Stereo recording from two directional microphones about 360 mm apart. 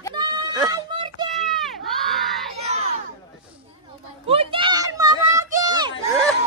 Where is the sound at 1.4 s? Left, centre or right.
Centre.